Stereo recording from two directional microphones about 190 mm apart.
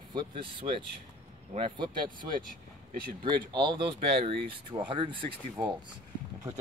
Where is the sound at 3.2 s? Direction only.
25° right (ahead or behind).